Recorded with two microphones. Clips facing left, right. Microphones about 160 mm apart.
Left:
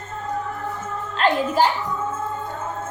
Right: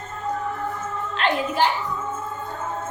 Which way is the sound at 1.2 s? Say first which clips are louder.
Left 4 dB; 40° left (ahead or behind).